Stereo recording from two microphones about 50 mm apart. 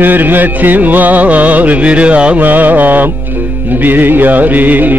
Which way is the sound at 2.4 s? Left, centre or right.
Right.